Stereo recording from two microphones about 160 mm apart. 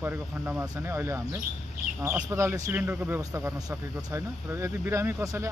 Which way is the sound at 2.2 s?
20° right (ahead or behind).